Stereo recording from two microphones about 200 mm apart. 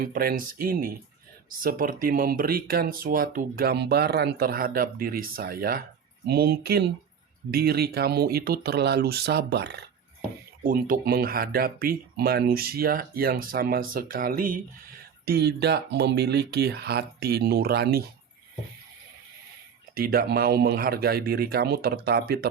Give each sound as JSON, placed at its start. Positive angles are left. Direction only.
{"t": 0.0, "sound": "speech", "side_deg": -45}
{"t": 10.6, "sound": "speech", "side_deg": -45}
{"t": 15.3, "sound": "speech", "side_deg": -55}
{"t": 20.0, "sound": "speech", "side_deg": -50}